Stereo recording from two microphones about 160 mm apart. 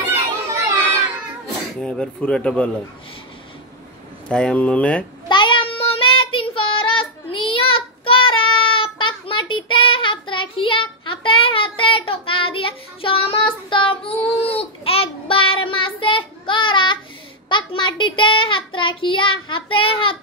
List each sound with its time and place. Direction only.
0.1 s children playing: 20° right (ahead or behind)
1.8 s speech: 5° left (ahead or behind)
4.3 s speech: 5° left (ahead or behind)
5.3 s child singing: 30° left (ahead or behind)